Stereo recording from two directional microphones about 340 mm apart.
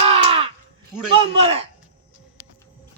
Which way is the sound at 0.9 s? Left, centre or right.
Centre.